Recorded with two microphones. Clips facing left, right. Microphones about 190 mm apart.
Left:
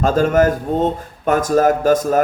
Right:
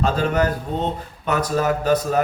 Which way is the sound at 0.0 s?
45° left (ahead or behind).